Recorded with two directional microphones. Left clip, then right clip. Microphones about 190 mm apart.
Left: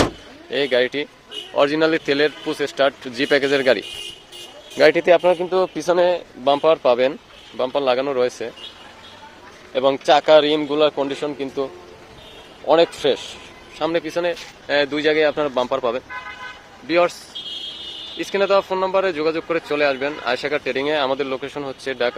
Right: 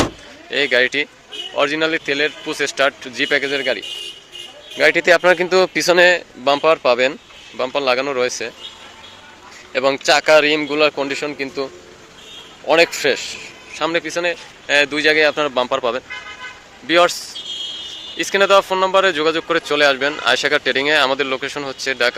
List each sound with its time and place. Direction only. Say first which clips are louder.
0.5 s speech: right 3 dB; 15° left (ahead or behind)
1.5 s speech: left 1 dB; 25° left (ahead or behind)
2.6 s speech: right 2 dB; 15° left (ahead or behind); by 3.8 s 35° left (ahead or behind)
4.8 s speech: even; 20° left (ahead or behind)
5.0 s speech: right 2 dB; 5° left (ahead or behind)
5.3 s speech: right 4 dB; 10° right (ahead or behind); by 8.5 s 10° left (ahead or behind)
9.7 s speech: right 1 dB; 5° left (ahead or behind)